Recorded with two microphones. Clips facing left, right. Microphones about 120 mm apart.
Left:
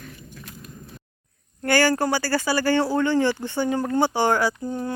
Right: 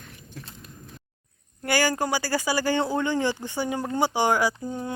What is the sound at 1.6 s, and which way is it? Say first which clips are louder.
Speech: left 4 dB; 10° right (ahead or behind).